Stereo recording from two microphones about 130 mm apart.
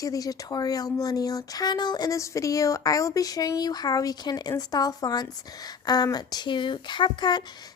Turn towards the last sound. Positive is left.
turn(degrees=35)  # may be behind; listen again after turning